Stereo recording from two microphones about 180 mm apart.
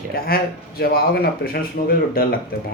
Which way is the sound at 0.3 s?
55° left (ahead or behind).